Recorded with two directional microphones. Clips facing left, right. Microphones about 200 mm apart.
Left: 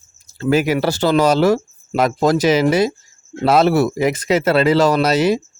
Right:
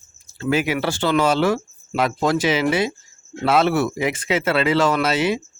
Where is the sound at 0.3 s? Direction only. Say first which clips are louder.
Left 5 dB; 40° left (ahead or behind).